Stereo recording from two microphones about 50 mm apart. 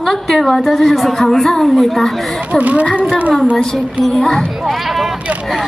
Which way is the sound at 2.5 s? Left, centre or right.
Right.